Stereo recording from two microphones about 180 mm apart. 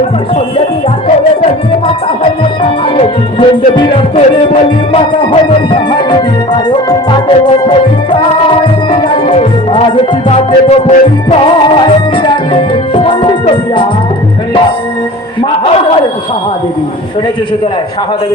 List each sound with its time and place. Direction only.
2.6 s music: 30° left (ahead or behind)
12.9 s music: 30° left (ahead or behind)
15.4 s a sound: 30° left (ahead or behind)